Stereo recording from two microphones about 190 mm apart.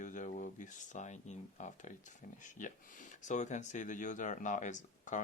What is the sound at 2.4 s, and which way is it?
Speech, 40° left (ahead or behind).